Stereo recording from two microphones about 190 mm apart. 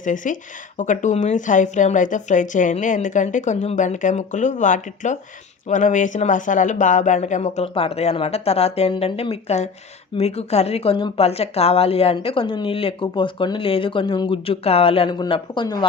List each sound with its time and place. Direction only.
0.0 s speech: 40° left (ahead or behind); by 15.9 s 20° left (ahead or behind)